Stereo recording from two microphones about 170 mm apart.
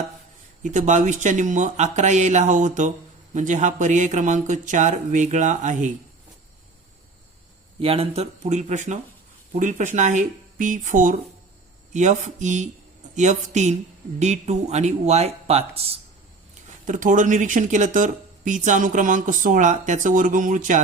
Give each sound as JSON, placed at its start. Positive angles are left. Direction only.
{"t": 0.6, "sound": "speech", "side_deg": -45}
{"t": 7.8, "sound": "speech", "side_deg": -35}
{"t": 16.6, "sound": "speech", "side_deg": -50}